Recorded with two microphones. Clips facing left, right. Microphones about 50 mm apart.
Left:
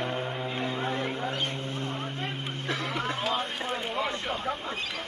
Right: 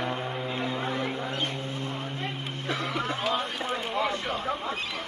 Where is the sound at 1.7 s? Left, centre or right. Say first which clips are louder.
Even; left.